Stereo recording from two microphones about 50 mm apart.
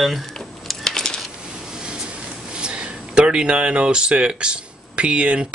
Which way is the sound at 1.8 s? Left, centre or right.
Centre.